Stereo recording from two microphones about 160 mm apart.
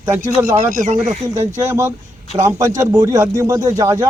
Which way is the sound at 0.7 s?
50° right (ahead or behind).